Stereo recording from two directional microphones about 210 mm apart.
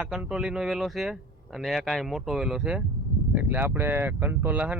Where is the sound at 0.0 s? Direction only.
5° right (ahead or behind).